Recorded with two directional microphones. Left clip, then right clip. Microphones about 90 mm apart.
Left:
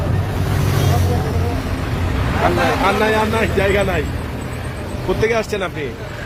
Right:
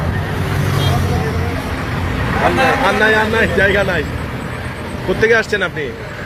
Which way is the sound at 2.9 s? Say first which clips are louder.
Right 3 dB; 30° left (ahead or behind).